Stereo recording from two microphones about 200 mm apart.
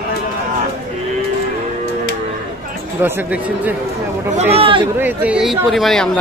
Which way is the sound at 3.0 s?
10° right (ahead or behind).